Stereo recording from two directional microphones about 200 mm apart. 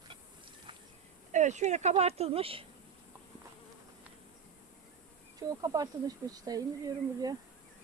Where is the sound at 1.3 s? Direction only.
35° right (ahead or behind).